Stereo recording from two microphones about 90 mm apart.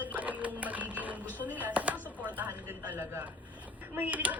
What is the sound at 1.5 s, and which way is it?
Chopping, 15° right (ahead or behind).